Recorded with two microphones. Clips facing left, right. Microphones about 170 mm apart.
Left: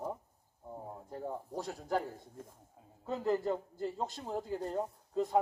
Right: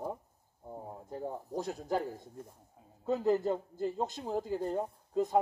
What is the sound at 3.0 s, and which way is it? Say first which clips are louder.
A man's voice: right 4 dB; 15° right (ahead or behind).